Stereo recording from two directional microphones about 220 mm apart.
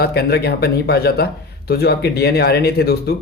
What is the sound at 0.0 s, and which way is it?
A man's voice, 45° left (ahead or behind).